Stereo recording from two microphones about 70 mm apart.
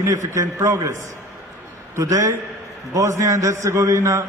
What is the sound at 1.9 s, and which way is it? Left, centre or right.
A man's voice, right.